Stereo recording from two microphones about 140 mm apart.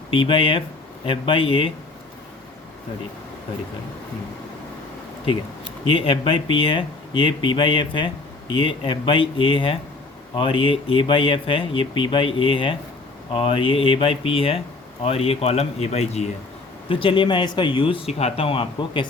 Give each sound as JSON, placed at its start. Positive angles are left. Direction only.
{"t": 0.1, "sound": "speech", "side_deg": 40}
{"t": 5.9, "sound": "speech", "side_deg": 40}
{"t": 16.9, "sound": "speech", "side_deg": 40}